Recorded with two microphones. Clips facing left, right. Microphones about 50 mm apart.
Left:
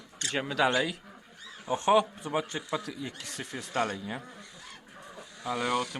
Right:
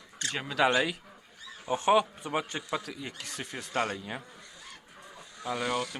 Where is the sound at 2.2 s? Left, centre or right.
Right.